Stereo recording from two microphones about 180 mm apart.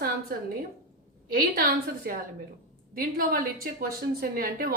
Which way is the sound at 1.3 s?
55° right (ahead or behind).